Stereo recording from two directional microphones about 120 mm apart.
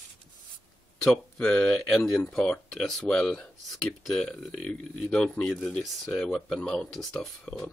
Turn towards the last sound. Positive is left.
turn(degrees=5)  # may be behind; listen again after turning